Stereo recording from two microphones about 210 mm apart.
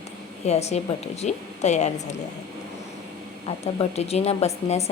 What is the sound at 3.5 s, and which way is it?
A woman's voice, 30° left (ahead or behind).